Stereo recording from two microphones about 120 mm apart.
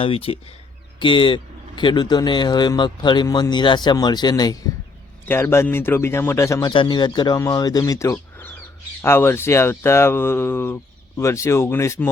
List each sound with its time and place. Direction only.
0.0 s a man's voice: 50° left (ahead or behind); by 4.7 s 35° left (ahead or behind)
5.3 s speech: 20° left (ahead or behind)
6.7 s a man's voice: 40° left (ahead or behind)
8.1 s bird: 15° left (ahead or behind)
9.0 s speech: 20° left (ahead or behind)